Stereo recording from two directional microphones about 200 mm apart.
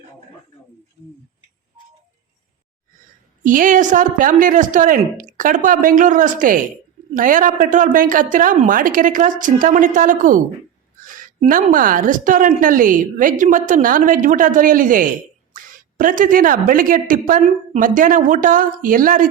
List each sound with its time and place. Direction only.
3.4 s a woman's voice: 40° right (ahead or behind)